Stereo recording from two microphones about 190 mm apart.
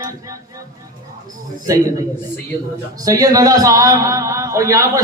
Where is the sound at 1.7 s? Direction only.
15° right (ahead or behind).